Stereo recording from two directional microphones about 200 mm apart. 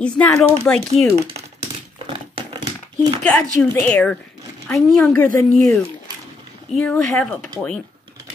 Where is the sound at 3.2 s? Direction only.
5° left (ahead or behind).